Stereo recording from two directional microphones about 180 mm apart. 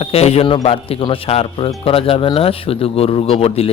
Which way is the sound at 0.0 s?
35° left (ahead or behind).